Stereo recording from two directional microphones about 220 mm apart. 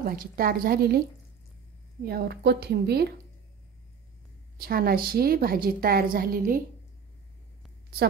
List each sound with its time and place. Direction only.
0.0 s a woman's voice: 45° right (ahead or behind)
2.0 s a woman's voice: 45° right (ahead or behind)
4.6 s a woman's voice: 45° right (ahead or behind)